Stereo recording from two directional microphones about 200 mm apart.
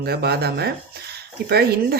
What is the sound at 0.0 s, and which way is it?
Speech, 55° right (ahead or behind).